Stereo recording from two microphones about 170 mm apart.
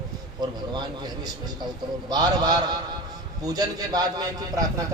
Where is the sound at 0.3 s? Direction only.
25° right (ahead or behind).